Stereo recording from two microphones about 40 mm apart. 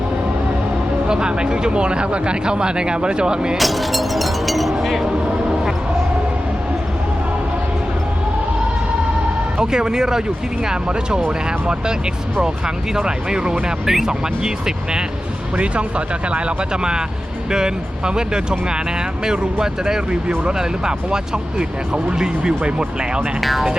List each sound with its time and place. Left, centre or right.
1.0 s speech: right
3.6 s a sound: centre
9.6 s speech: centre
15.5 s speech: right
17.5 s speech: centre
23.4 s speech: centre